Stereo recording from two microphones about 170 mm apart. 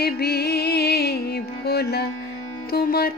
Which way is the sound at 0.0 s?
70° left (ahead or behind).